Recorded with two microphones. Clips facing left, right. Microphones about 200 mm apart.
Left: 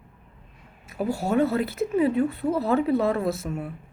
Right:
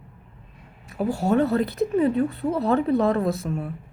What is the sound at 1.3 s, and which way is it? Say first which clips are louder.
A woman's voice: right 2 dB; 40° right (ahead or behind).